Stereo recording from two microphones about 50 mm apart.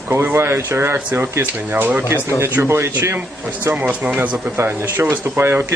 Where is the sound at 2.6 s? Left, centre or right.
Right.